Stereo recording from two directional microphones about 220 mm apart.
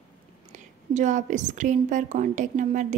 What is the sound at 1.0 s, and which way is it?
A woman's voice, 35° right (ahead or behind).